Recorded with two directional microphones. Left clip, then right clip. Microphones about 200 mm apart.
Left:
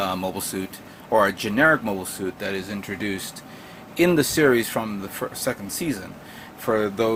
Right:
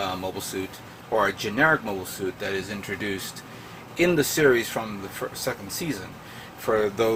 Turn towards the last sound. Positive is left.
turn(degrees=20)  # may be behind; listen again after turning